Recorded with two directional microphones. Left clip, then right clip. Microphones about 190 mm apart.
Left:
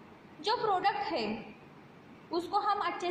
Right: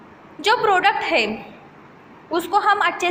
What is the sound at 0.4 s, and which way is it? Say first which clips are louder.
Speech: right 13 dB; 20° right (ahead or behind).